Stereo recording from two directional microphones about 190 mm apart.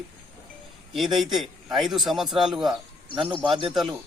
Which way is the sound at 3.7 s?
Centre (ahead or behind).